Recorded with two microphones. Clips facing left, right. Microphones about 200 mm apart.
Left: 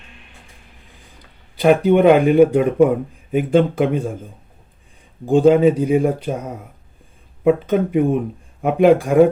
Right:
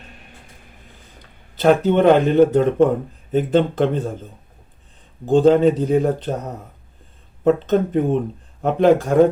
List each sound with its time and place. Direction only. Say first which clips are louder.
0.0 s music: right 3 dB; 45° right (ahead or behind)
1.2 s speech: left 1 dB; 10° left (ahead or behind)